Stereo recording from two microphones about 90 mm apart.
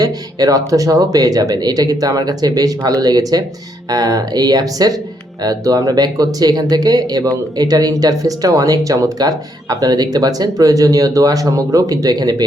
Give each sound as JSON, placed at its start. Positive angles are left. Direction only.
{"t": 0.0, "sound": "speech", "side_deg": -45}